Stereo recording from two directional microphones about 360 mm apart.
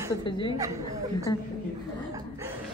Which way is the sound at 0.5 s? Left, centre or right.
Centre.